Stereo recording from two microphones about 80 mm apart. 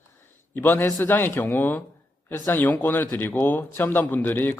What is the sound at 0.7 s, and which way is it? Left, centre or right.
A man's voice, left.